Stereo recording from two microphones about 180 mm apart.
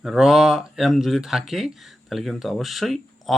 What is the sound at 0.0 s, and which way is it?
Speech, centre (ahead or behind).